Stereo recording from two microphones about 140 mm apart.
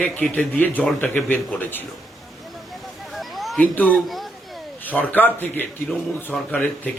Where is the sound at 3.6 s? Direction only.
10° left (ahead or behind).